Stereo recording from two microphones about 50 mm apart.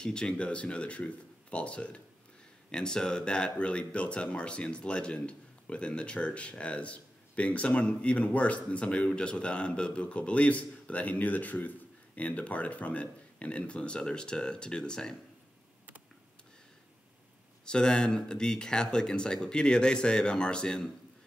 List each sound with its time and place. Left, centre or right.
0.0 s a man's voice: centre
17.6 s speech: centre